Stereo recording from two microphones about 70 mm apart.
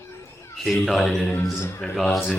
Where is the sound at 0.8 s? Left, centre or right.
Centre.